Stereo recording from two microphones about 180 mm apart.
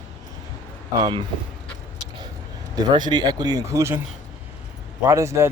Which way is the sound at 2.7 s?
25° right (ahead or behind).